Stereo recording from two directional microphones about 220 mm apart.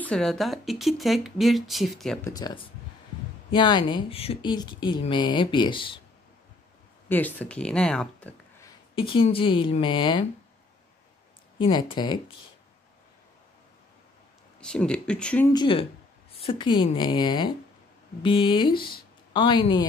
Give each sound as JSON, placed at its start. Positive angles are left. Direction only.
{"t": 0.0, "sound": "speech", "side_deg": 5}
{"t": 2.2, "sound": "speech", "side_deg": 15}
{"t": 7.1, "sound": "speech", "side_deg": 5}
{"t": 8.9, "sound": "speech", "side_deg": 25}
{"t": 11.5, "sound": "speech", "side_deg": 20}
{"t": 14.6, "sound": "speech", "side_deg": 5}
{"t": 15.5, "sound": "speech", "side_deg": 20}